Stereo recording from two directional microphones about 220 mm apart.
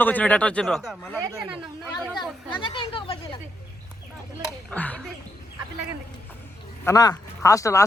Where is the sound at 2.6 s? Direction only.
20° left (ahead or behind).